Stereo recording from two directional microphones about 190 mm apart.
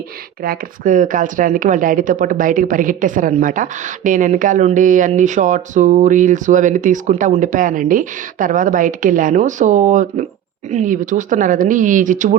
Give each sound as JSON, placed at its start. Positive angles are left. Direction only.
{"t": 0.4, "sound": "speech", "side_deg": -45}